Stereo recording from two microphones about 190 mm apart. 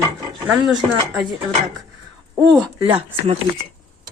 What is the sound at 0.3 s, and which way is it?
Speech, centre (ahead or behind).